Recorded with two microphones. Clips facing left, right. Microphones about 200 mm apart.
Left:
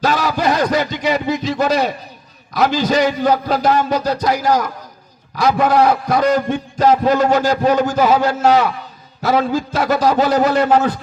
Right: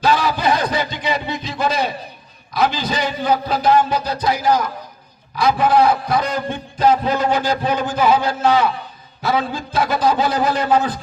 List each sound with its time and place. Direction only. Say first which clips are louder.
0.0 s a man's voice: left 1 dB; 45° left (ahead or behind)